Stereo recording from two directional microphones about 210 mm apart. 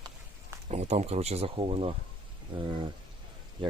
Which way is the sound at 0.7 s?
30° right (ahead or behind).